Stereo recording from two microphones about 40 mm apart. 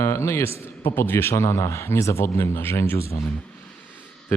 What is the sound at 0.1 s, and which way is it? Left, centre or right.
A man's voice, left.